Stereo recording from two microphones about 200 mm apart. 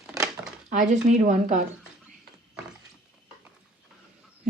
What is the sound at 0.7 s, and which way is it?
Speech, 40° right (ahead or behind).